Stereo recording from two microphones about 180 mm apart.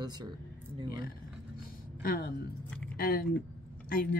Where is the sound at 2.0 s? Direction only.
55° left (ahead or behind).